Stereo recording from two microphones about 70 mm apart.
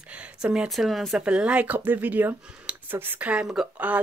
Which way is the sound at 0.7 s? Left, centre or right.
Centre.